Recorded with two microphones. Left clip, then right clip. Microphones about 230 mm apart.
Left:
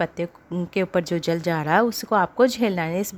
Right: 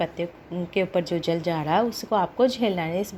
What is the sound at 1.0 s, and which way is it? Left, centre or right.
Speech, left.